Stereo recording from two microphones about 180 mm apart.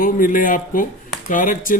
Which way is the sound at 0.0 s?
50° left (ahead or behind).